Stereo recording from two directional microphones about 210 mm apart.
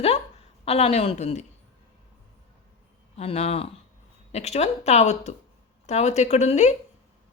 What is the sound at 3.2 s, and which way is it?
A woman's voice, 30° left (ahead or behind).